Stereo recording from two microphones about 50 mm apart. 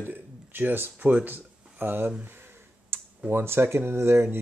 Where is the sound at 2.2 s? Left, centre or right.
Right.